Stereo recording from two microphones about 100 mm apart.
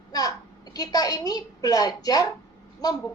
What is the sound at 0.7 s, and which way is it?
A woman's voice, 40° left (ahead or behind).